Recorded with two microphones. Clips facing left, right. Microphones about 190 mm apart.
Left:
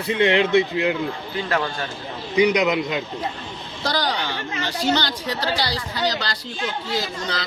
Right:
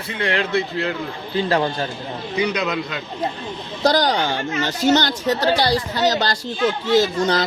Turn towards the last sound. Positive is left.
turn(degrees=-50)  # may be behind; listen again after turning